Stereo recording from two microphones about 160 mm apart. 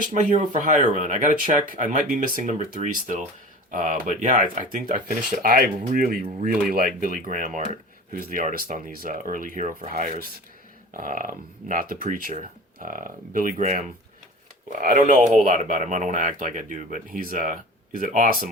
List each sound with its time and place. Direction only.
0.1 s speech: 50° right (ahead or behind)
14.7 s speech: 60° right (ahead or behind)